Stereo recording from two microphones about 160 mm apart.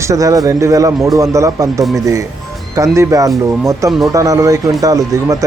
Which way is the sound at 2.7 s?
20° right (ahead or behind).